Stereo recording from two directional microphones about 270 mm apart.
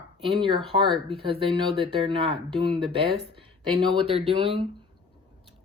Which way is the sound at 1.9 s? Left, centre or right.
Centre.